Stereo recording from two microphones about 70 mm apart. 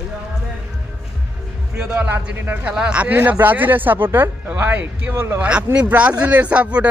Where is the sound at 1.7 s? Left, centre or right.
Right.